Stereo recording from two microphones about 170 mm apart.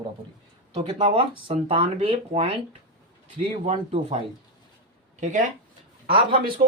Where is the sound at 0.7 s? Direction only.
30° right (ahead or behind).